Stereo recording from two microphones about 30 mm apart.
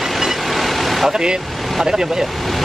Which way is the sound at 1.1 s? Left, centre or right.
Right.